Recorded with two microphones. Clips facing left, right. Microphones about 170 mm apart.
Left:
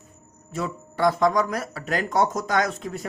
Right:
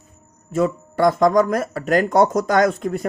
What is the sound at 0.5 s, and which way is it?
A man's voice, 45° right (ahead or behind).